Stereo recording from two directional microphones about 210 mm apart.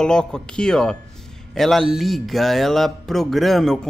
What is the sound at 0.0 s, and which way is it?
Speech, 5° left (ahead or behind).